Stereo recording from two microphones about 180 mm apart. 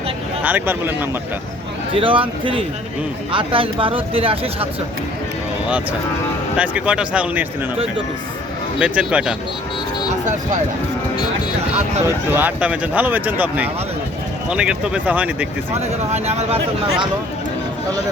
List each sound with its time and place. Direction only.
0.4 s speech: 10° right (ahead or behind)
1.9 s speech: 30° right (ahead or behind)
6.6 s speech: 5° right (ahead or behind)
8.8 s speech: 5° right (ahead or behind)
12.0 s speech: 10° right (ahead or behind)
15.8 s speech: 35° right (ahead or behind)